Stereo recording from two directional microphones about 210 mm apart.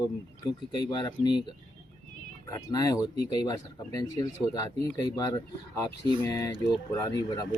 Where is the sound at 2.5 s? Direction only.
15° left (ahead or behind).